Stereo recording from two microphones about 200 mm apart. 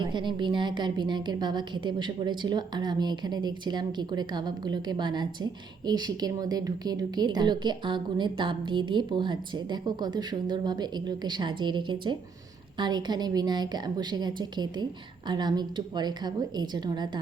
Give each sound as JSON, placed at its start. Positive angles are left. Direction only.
{"t": 0.0, "sound": "a woman's voice", "side_deg": -25}